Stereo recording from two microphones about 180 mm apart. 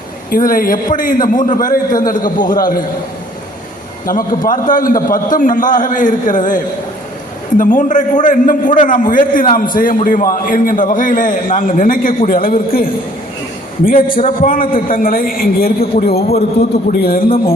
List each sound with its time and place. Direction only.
0.3 s a man's voice: 50° left (ahead or behind)
4.1 s a man's voice: 50° left (ahead or behind)